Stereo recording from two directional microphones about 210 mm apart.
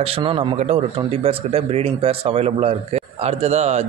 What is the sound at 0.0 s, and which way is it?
A man's voice, 25° right (ahead or behind).